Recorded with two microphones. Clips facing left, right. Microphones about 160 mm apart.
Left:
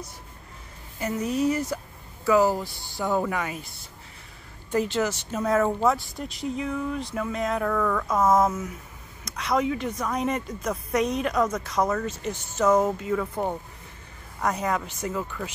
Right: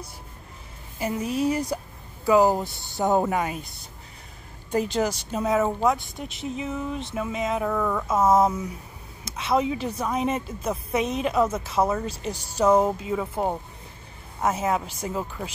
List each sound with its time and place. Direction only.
1.5 s a woman's voice: 15° right (ahead or behind); by 3.5 s 30° right (ahead or behind)
4.6 s speech: 15° right (ahead or behind)
5.5 s speech: centre (ahead or behind)
5.9 s a woman's voice: 20° right (ahead or behind)
9.2 s a woman's voice: 25° right (ahead or behind)
12.8 s a woman's voice: 15° right (ahead or behind)